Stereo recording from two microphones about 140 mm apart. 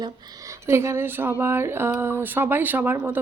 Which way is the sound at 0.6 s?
20° right (ahead or behind).